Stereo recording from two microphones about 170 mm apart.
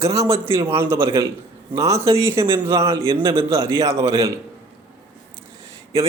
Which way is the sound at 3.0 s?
30° right (ahead or behind).